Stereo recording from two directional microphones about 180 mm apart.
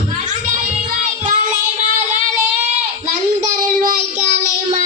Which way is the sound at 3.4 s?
45° right (ahead or behind).